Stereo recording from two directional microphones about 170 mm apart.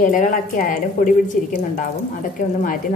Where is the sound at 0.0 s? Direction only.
50° left (ahead or behind).